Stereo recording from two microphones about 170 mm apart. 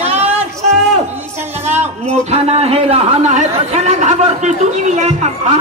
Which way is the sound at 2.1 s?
40° right (ahead or behind).